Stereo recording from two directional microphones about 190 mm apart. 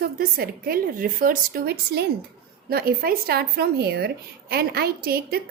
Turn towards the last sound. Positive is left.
turn(degrees=-55)  # may be behind; listen again after turning